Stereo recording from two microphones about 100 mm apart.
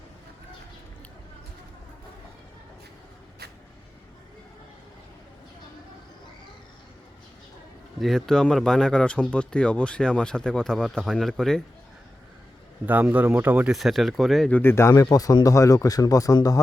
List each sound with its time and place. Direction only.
7.9 s speech: centre (ahead or behind)
12.8 s speech: 15° right (ahead or behind)
13.7 s speech: centre (ahead or behind)
14.5 s speech: 20° left (ahead or behind)
14.9 s speech: 40° left (ahead or behind)